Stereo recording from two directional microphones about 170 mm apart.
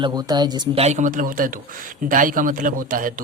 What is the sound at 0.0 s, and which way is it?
Speech, 25° right (ahead or behind).